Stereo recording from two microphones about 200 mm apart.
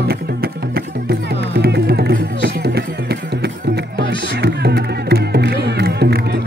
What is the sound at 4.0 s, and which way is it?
Music, 55° right (ahead or behind).